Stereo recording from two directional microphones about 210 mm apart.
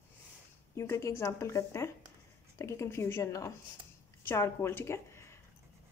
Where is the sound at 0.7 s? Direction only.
15° left (ahead or behind).